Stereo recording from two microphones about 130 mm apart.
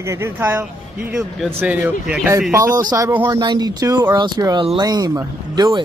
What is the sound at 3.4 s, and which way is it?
Speech, 30° right (ahead or behind).